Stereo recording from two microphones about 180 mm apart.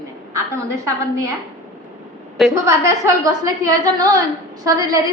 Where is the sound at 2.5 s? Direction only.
15° right (ahead or behind).